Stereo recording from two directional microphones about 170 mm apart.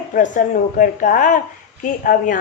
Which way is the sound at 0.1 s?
50° left (ahead or behind).